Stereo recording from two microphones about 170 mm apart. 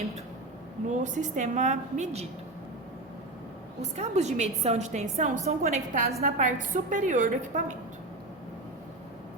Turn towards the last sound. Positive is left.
turn(degrees=-50)  # may be behind; listen again after turning